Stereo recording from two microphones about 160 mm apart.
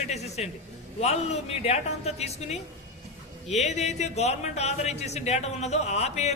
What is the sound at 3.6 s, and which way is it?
A man's voice, 45° left (ahead or behind).